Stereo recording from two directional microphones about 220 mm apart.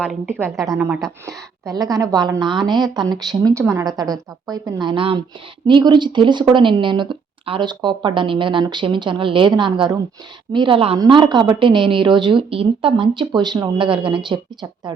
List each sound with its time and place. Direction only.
0.0 s a woman's voice: 5° right (ahead or behind)